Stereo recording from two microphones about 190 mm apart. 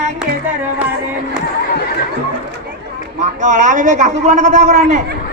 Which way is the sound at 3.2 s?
40° right (ahead or behind).